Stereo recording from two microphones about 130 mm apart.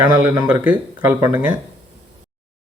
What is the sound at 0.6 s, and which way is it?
Speech, 15° right (ahead or behind).